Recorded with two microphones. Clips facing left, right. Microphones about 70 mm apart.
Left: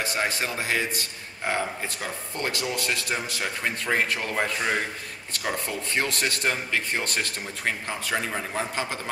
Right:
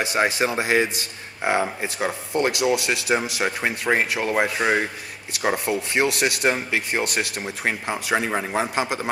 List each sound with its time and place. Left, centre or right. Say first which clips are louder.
0.0 s a man's voice: right 6 dB; centre